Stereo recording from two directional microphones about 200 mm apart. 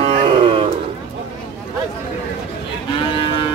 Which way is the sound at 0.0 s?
25° right (ahead or behind).